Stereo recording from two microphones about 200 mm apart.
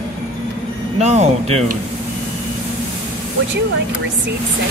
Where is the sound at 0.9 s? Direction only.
35° right (ahead or behind).